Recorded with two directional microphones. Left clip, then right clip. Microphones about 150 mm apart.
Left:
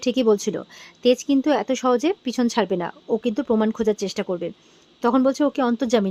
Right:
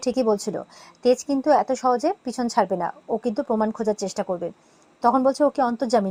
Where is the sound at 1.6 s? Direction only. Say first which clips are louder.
Left 1 dB; 25° left (ahead or behind).